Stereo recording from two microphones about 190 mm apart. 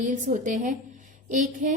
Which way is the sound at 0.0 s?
40° right (ahead or behind).